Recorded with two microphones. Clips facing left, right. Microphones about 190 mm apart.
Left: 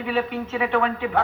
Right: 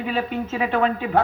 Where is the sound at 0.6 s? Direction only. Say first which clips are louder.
Right 1 dB; 35° right (ahead or behind).